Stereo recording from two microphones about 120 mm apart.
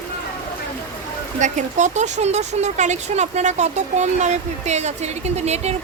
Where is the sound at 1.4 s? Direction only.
85° right.